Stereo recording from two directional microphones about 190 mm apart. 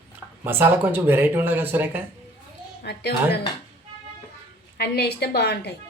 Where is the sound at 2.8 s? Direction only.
60° left (ahead or behind).